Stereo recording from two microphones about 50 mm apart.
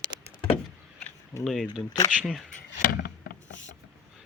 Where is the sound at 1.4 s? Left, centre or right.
Centre.